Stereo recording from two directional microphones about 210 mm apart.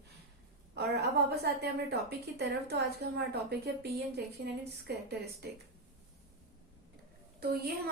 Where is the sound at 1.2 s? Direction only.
50° right (ahead or behind).